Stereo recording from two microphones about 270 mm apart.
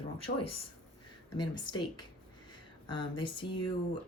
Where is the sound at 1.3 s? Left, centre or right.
Centre.